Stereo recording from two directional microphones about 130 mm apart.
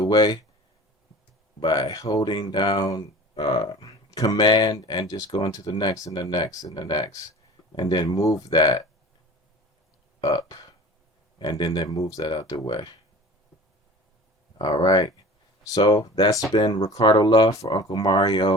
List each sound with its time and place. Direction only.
0.0 s speech: 30° left (ahead or behind)
1.6 s speech: 30° left (ahead or behind)
3.8 s speech: 25° left (ahead or behind)
10.2 s burping: 30° left (ahead or behind)
11.6 s speech: 30° left (ahead or behind)
14.6 s speech: 30° left (ahead or behind)
16.5 s speech: 40° left (ahead or behind)